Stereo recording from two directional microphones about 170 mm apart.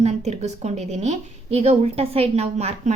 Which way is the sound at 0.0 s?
40° right (ahead or behind).